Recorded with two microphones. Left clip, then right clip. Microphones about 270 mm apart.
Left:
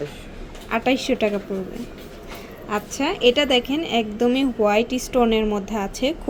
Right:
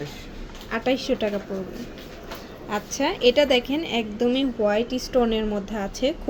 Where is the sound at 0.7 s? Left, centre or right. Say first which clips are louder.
Left 3 dB; centre.